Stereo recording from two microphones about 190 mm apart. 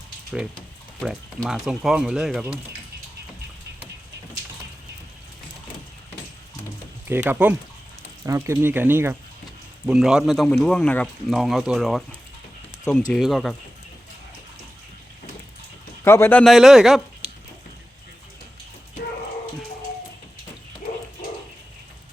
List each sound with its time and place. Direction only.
1.0 s speech: centre (ahead or behind)
7.1 s speech: 10° right (ahead or behind)
13.1 s speech: centre (ahead or behind)
16.0 s a man's voice: 10° left (ahead or behind)
16.4 s speech: centre (ahead or behind)
17.2 s chicken: 30° right (ahead or behind)